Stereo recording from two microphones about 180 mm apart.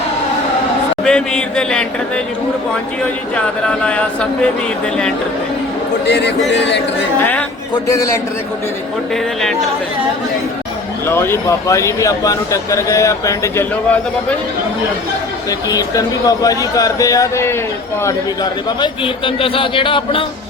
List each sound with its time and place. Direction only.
1.0 s speech: 5° left (ahead or behind)
3.3 s speech: 5° left (ahead or behind)
6.1 s a man's voice: 70° left (ahead or behind)
7.2 s speech: 10° left (ahead or behind)
11.0 s speech: 15° left (ahead or behind)
15.4 s a man's voice: 20° left (ahead or behind)
18.8 s a man's voice: 30° left (ahead or behind)